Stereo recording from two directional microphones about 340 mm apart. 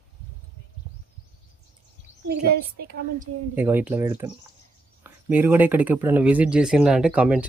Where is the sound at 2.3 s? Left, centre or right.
Right.